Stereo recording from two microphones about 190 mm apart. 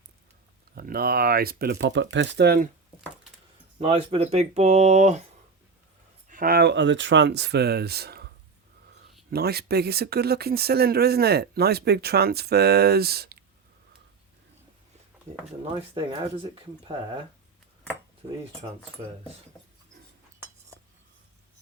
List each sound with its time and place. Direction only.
0.8 s speech: 50° right (ahead or behind)
3.8 s speech: 30° right (ahead or behind)
6.2 s speech: 45° right (ahead or behind)
9.3 s speech: 55° right (ahead or behind)
16.4 s speech: 25° right (ahead or behind)
18.2 s speech: 30° right (ahead or behind)